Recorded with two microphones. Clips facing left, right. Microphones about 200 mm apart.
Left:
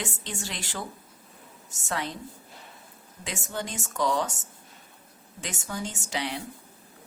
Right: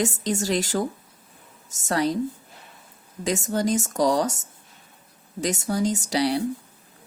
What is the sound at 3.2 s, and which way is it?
A woman's voice, 40° right (ahead or behind).